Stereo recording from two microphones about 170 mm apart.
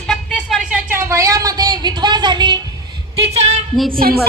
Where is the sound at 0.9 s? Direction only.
15° right (ahead or behind).